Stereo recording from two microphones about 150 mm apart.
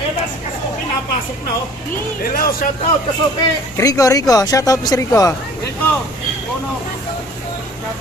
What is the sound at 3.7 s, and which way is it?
Speech, 20° left (ahead or behind).